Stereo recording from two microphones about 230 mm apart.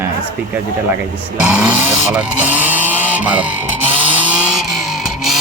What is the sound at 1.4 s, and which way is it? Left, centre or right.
Speech, centre.